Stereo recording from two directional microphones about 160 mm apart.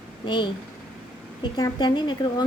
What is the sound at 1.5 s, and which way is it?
Speech, 25° left (ahead or behind).